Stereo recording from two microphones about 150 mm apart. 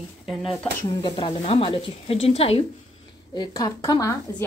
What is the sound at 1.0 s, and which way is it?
Speech, 35° left (ahead or behind).